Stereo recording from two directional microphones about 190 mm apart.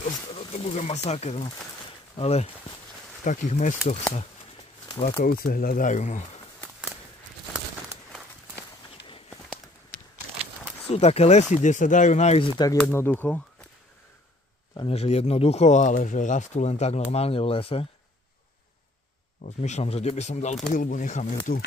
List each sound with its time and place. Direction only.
0.4 s speech: 35° left (ahead or behind)
5.2 s speech: 50° left (ahead or behind)
10.9 s speech: 35° left (ahead or behind)
12.5 s speech: 15° left (ahead or behind)
14.8 s speech: 30° left (ahead or behind)
19.4 s speech: 35° left (ahead or behind)